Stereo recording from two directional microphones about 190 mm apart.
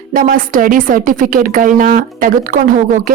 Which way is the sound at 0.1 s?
45° right (ahead or behind).